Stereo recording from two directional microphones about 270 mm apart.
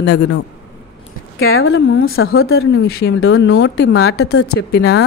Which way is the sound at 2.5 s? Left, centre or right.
Left.